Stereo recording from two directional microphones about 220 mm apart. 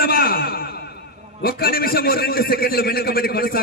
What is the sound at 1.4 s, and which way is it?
A man's voice, 40° left (ahead or behind).